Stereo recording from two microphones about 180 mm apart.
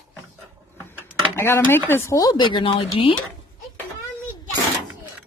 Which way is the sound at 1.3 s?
15° left (ahead or behind).